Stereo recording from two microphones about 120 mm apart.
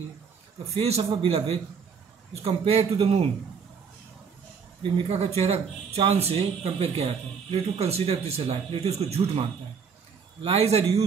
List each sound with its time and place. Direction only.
0.7 s speech: 60° right (ahead or behind)
5.0 s speech: 60° right (ahead or behind)